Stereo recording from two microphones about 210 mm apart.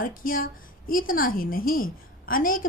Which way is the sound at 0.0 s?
40° left (ahead or behind).